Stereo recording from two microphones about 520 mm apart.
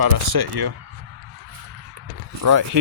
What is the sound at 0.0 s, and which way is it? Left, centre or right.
Speech, right.